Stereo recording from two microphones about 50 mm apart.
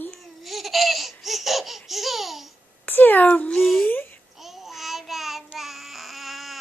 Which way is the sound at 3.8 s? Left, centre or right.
Left.